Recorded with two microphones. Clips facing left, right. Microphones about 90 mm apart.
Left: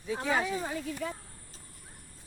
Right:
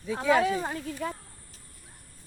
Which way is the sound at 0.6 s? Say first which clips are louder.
Right 2 dB; 45° right (ahead or behind).